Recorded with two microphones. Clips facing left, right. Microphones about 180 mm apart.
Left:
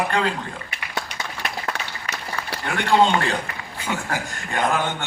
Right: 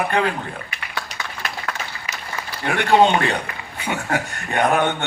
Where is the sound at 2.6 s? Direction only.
65° right (ahead or behind).